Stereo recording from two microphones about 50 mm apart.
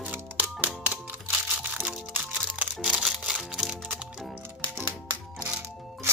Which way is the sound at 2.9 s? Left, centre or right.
Centre.